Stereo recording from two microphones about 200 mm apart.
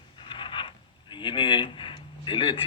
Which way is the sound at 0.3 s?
25° left (ahead or behind).